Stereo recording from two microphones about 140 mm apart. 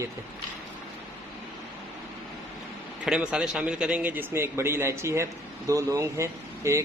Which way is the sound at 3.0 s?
5° right (ahead or behind).